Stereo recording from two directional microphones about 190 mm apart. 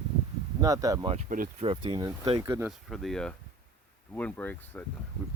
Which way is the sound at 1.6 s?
30° right (ahead or behind).